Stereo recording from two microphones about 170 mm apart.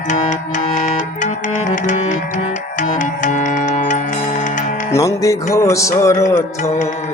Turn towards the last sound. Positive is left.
turn(degrees=15)  # may be behind; listen again after turning